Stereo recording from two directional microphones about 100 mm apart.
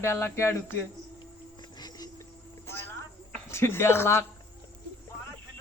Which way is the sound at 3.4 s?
25° left (ahead or behind).